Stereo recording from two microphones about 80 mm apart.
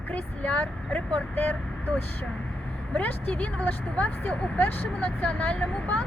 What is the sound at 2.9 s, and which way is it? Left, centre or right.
Speech, centre.